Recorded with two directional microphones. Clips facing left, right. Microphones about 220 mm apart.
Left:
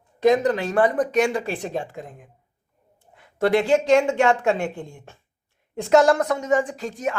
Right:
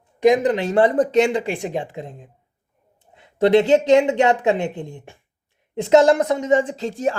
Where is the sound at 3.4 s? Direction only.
20° right (ahead or behind).